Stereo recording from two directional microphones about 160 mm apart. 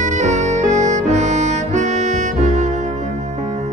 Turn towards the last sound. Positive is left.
turn(degrees=-45)  # may be behind; listen again after turning